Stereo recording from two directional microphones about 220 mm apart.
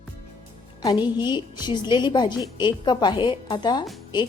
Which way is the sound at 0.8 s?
20° left (ahead or behind).